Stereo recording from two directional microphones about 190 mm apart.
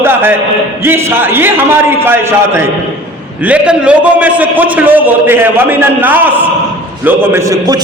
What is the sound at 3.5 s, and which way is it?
A man's voice, 5° right (ahead or behind).